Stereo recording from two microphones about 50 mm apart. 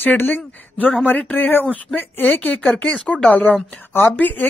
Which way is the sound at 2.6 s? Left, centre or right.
Left.